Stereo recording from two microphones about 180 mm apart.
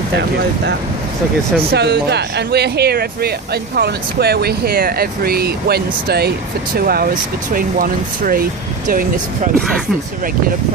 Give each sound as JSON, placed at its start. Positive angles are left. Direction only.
{"t": 1.7, "sound": "speech", "side_deg": -65}